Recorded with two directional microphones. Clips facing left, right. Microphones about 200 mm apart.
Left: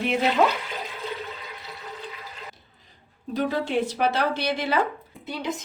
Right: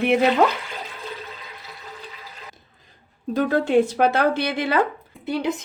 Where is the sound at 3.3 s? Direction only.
50° right (ahead or behind).